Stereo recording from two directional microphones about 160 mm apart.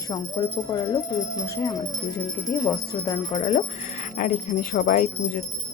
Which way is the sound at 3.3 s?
35° left (ahead or behind).